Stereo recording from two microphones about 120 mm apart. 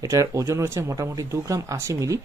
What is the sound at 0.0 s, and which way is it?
Speech, 30° right (ahead or behind).